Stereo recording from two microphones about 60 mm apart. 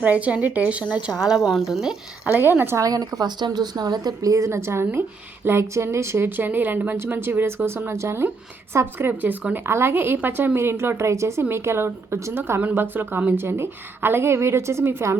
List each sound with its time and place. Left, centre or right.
0.0 s speech: right
1.1 s speech: left
1.4 s a woman's voice: centre
2.4 s a woman's voice: right
2.7 s a woman's voice: right
6.2 s a woman's voice: right
12.4 s a woman's voice: right